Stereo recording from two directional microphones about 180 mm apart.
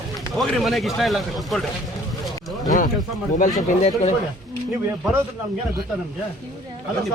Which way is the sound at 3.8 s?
40° left (ahead or behind).